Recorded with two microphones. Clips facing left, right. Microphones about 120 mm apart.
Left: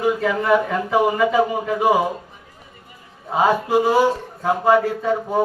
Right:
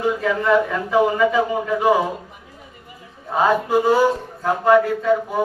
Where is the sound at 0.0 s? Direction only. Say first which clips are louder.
Even; 15° left (ahead or behind).